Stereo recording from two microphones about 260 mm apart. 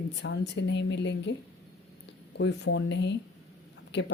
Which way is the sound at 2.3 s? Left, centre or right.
Left.